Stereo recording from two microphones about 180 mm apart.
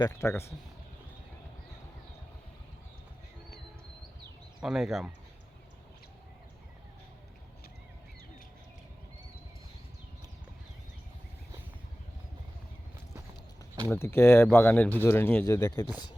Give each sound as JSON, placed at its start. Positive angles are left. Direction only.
{"t": 0.0, "sound": "speech", "side_deg": 15}
{"t": 4.6, "sound": "speech", "side_deg": 0}
{"t": 13.8, "sound": "speech", "side_deg": 10}